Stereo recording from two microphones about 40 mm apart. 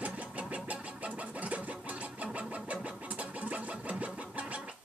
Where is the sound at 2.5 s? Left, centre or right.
Right.